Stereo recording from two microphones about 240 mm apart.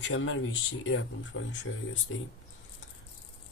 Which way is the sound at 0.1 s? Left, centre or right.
Left.